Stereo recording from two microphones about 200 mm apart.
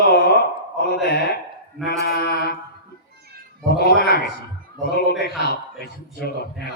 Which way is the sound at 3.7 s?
50° left (ahead or behind).